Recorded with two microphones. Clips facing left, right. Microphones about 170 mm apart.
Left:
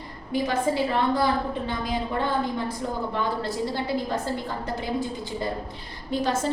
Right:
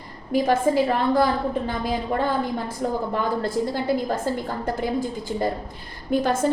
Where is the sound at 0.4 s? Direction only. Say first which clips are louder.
Right 5 dB; 45° right (ahead or behind).